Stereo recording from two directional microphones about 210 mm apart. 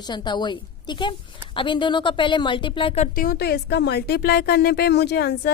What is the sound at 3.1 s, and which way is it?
Speech, 45° left (ahead or behind).